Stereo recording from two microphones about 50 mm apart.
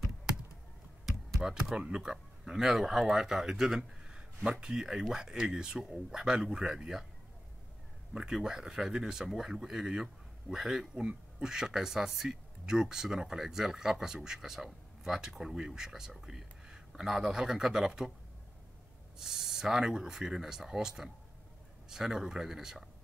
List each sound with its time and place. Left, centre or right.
1.4 s speech: centre
8.1 s speech: centre
19.1 s speech: centre